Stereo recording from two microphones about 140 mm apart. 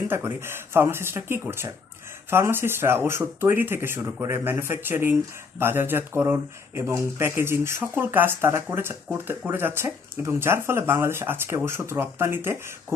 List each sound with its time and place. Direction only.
0.1 s speech: 15° right (ahead or behind)